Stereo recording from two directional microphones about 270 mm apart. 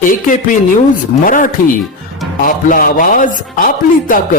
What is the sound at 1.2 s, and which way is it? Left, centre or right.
Speech, left.